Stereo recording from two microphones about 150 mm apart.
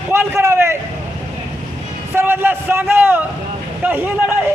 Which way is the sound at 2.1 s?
15° right (ahead or behind).